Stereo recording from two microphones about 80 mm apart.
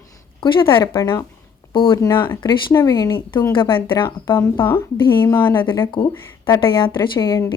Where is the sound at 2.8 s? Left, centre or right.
Left.